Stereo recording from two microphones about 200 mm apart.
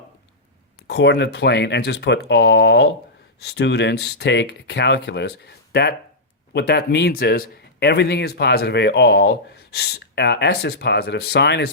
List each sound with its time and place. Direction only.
0.9 s speech: 55° left (ahead or behind)